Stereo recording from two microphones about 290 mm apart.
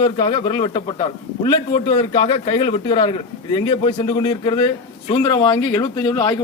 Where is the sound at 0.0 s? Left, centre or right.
Centre.